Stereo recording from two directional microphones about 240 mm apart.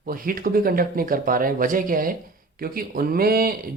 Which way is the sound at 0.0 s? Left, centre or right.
Right.